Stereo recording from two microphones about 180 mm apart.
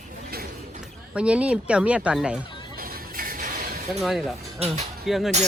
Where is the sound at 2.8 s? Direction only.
55° right (ahead or behind).